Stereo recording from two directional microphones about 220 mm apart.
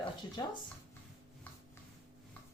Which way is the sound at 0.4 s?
15° left (ahead or behind).